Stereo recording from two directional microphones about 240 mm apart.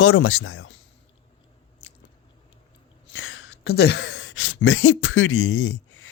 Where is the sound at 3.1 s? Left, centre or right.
Left.